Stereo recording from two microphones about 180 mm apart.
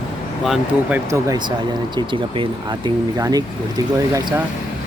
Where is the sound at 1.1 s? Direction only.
15° right (ahead or behind).